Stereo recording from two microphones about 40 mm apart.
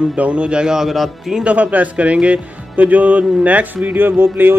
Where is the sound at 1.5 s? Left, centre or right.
Right.